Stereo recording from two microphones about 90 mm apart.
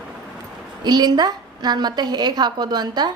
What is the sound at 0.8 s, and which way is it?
A woman's voice, 50° right (ahead or behind).